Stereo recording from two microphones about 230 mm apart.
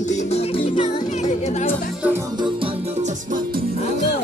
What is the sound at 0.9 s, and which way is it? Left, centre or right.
Music, left.